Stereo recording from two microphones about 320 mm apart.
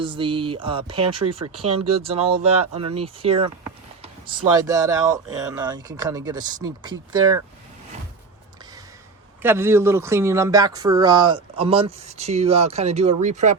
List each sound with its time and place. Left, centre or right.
0.0 s speech: centre
1.2 s speech: right
2.0 s speech: centre
4.5 s speech: centre
9.4 s speech: centre